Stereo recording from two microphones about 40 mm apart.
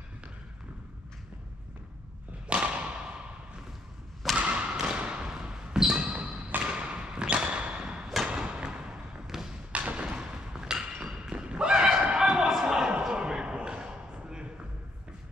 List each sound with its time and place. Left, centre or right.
2.4 s thump: right
4.4 s thump: right
5.3 s basketball bounce: centre
5.9 s basketball bounce: right
6.6 s a sound: right
8.3 s thump: right
9.3 s thump: centre
9.7 s thump: right
10.0 s thump: centre
13.1 s a sound: right